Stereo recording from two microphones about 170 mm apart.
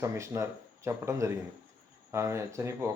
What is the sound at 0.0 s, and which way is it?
Speech, 15° right (ahead or behind).